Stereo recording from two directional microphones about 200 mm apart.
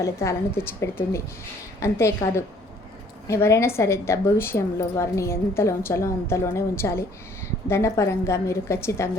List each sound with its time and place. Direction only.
0.0 s a woman's voice: 15° left (ahead or behind)